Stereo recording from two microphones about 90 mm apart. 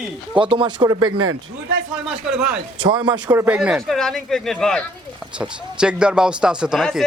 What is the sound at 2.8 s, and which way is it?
Speech, 60° right (ahead or behind).